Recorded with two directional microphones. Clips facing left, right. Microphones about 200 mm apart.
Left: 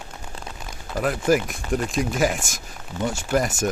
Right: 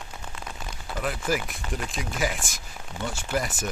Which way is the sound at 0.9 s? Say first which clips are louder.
Left 8 dB; 50° left (ahead or behind).